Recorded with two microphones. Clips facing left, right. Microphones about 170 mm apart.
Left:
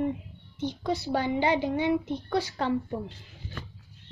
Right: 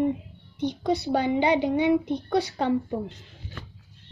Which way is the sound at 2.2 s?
35° right (ahead or behind).